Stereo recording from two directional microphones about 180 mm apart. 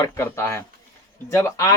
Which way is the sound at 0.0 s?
15° left (ahead or behind).